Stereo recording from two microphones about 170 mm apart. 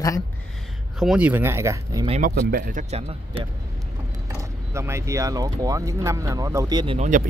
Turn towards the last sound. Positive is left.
turn(degrees=-50)  # may be behind; listen again after turning